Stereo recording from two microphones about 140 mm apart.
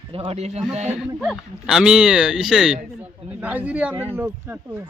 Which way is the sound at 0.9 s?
5° right (ahead or behind).